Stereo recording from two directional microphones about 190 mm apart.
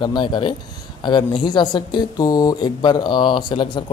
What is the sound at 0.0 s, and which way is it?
Speech, 25° left (ahead or behind).